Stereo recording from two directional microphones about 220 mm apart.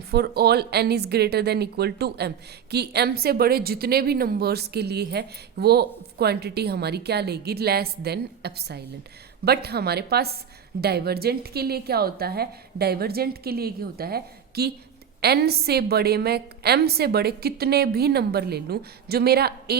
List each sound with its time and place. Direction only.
0.1 s a woman's voice: 45° right (ahead or behind)